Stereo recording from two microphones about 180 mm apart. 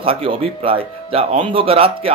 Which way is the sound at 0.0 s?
30° right (ahead or behind).